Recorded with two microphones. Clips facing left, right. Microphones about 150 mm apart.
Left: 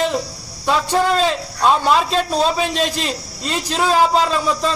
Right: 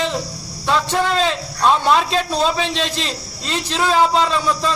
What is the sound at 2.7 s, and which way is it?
Speech, 45° left (ahead or behind).